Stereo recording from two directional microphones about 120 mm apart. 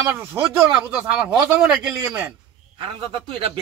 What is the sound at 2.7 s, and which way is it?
Speech, 50° right (ahead or behind).